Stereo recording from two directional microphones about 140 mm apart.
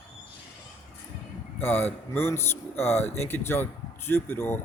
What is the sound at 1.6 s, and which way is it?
Speech, 15° left (ahead or behind).